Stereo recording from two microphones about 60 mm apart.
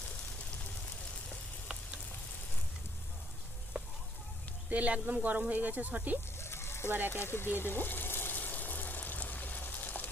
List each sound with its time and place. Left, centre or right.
4.7 s speech: right
6.4 s sheep: left
6.8 s speech: right
7.1 s water: left